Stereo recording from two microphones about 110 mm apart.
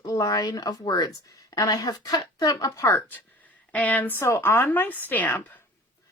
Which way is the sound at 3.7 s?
15° left (ahead or behind).